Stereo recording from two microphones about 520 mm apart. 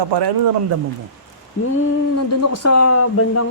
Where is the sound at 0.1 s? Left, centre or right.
Right.